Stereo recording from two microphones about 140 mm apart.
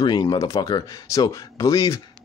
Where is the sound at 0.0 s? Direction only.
25° left (ahead or behind).